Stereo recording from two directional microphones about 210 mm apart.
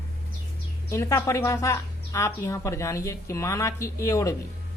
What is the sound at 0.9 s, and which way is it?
A woman's voice, 15° left (ahead or behind).